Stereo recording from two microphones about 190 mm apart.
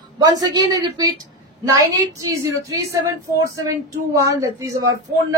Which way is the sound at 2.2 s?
15° right (ahead or behind).